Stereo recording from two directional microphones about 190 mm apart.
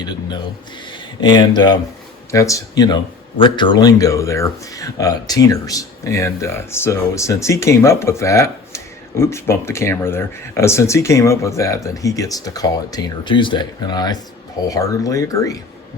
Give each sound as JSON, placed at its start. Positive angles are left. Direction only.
{"t": 1.2, "sound": "speech", "side_deg": 25}